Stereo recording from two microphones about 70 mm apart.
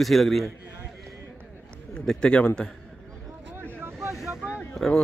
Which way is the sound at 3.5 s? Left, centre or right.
Right.